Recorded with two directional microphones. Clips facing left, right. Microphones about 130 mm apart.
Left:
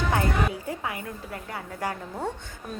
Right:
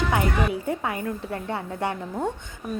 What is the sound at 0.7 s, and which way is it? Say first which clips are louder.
A woman's voice: right 5 dB; 30° right (ahead or behind).